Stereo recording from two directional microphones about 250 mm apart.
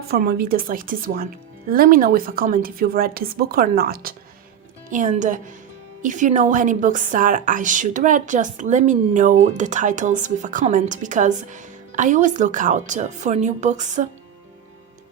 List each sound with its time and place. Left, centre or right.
0.1 s a woman's voice: right